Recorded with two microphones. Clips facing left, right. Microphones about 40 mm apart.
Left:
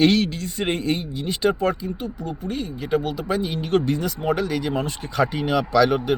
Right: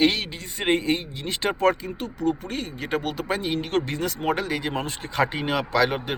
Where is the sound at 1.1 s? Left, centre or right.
Right.